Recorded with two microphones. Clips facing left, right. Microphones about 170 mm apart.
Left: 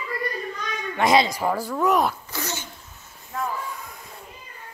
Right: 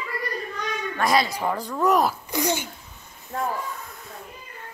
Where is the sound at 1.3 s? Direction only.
10° left (ahead or behind).